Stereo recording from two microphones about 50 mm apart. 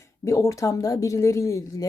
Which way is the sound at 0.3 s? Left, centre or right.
Left.